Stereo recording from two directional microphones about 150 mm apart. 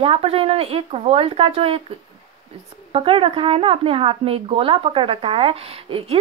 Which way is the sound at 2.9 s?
40° right (ahead or behind).